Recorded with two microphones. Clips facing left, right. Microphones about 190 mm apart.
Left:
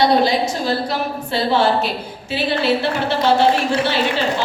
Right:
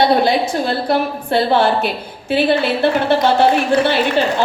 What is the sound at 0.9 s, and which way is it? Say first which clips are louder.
Speech: right 5 dB; 55° right (ahead or behind).